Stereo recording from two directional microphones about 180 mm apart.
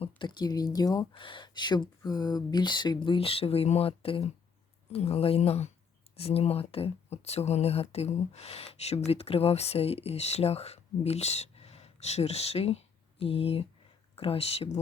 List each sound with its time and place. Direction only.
0.0 s speech: 25° left (ahead or behind)